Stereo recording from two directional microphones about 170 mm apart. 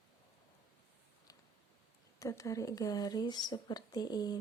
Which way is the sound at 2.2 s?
20° left (ahead or behind).